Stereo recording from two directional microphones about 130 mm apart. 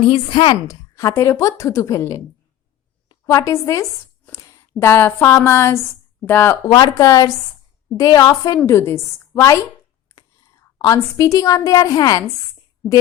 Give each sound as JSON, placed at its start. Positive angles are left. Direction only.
{"t": 0.1, "sound": "a woman's voice", "side_deg": 45}
{"t": 6.7, "sound": "a woman's voice", "side_deg": 30}